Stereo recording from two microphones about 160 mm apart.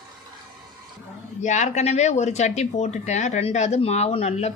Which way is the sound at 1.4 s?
50° left (ahead or behind).